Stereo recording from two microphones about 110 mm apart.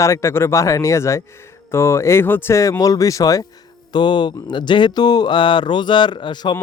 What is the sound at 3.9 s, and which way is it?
Speech, 45° left (ahead or behind).